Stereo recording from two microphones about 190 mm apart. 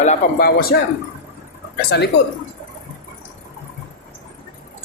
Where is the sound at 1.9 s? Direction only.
60° left (ahead or behind).